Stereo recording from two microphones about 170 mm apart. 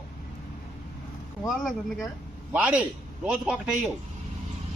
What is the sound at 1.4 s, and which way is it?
Speech, centre (ahead or behind).